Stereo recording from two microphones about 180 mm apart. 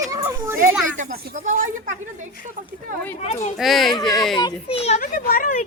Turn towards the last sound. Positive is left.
turn(degrees=45)  # may be behind; listen again after turning